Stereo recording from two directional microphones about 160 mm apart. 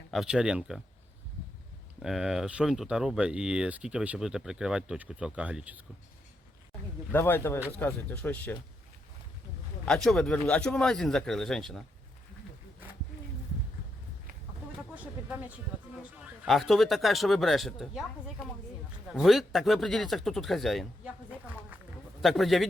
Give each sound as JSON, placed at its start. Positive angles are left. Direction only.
{"t": 0.1, "sound": "speech", "side_deg": -5}
{"t": 2.0, "sound": "speech", "side_deg": -5}
{"t": 7.1, "sound": "speech", "side_deg": 10}
{"t": 9.8, "sound": "speech", "side_deg": 5}
{"t": 14.9, "sound": "speech", "side_deg": -10}
{"t": 16.5, "sound": "speech", "side_deg": 0}
{"t": 19.1, "sound": "speech", "side_deg": 0}
{"t": 21.7, "sound": "a sound", "side_deg": -10}
{"t": 22.2, "sound": "speech", "side_deg": 0}